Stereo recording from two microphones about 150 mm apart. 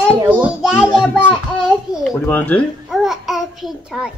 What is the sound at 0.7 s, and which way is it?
Speech, 15° left (ahead or behind).